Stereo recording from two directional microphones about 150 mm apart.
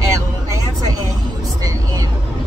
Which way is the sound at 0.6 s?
25° right (ahead or behind).